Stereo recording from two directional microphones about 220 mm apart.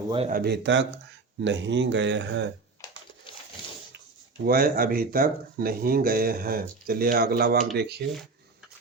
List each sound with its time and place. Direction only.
0.3 s speech: 45° right (ahead or behind)
3.3 s a sound: 20° left (ahead or behind)
4.4 s speech: 45° right (ahead or behind)